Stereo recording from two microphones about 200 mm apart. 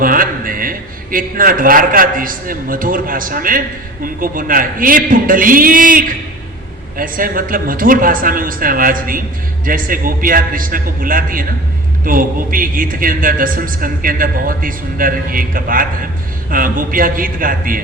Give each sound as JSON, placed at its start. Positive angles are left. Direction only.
{"t": 0.0, "sound": "a man's voice", "side_deg": -45}